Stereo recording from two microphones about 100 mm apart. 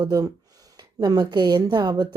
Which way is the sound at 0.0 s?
40° right (ahead or behind).